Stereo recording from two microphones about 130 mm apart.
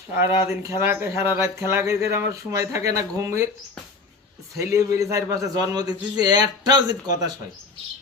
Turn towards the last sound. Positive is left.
turn(degrees=-30)  # may be behind; listen again after turning